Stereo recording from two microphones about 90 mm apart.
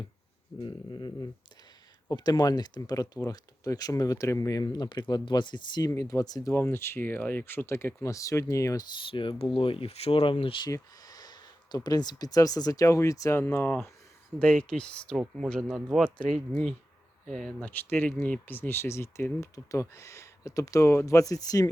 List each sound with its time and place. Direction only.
0.6 s a sound: 55° left (ahead or behind)
2.0 s speech: 45° left (ahead or behind)
5.9 s speech: 40° left (ahead or behind)
6.5 s speech: 25° left (ahead or behind)
9.0 s speech: 75° left (ahead or behind)
10.7 s speech: 40° left (ahead or behind); by 16.0 s centre (ahead or behind)
16.1 s speech: 15° left (ahead or behind); by 21.7 s 40° left (ahead or behind)